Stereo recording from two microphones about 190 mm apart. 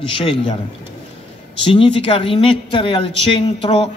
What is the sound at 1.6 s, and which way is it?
A man's voice, 30° left (ahead or behind).